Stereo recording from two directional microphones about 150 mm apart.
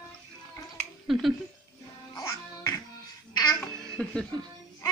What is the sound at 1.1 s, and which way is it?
Speech, centre (ahead or behind).